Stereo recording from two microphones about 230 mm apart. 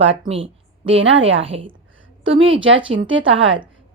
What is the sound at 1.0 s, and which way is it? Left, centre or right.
Speech, right.